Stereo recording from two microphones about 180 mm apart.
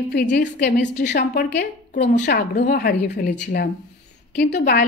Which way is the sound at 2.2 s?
45° left (ahead or behind).